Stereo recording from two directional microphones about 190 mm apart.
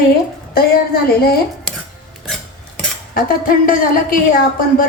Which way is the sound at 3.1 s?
50° left (ahead or behind).